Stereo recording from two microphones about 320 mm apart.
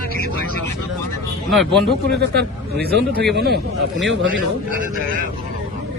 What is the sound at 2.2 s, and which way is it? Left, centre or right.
A man's voice, right.